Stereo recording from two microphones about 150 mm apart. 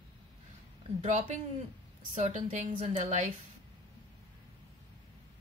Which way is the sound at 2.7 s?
40° right (ahead or behind).